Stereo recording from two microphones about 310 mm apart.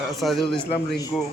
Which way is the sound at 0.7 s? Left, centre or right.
Centre.